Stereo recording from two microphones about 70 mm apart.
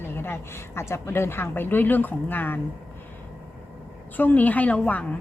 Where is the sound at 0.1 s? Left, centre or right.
Left.